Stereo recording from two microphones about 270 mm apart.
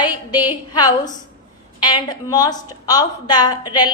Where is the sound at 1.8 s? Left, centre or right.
Centre.